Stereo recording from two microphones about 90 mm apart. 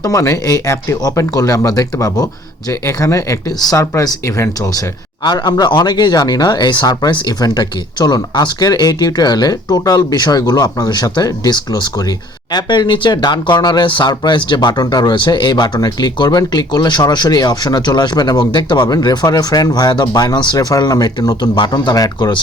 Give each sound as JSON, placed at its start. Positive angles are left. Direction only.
{"t": 0.0, "sound": "speech", "side_deg": 35}
{"t": 5.2, "sound": "speech", "side_deg": 50}